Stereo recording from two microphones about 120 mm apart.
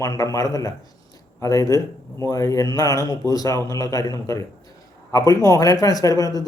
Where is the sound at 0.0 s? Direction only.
25° left (ahead or behind).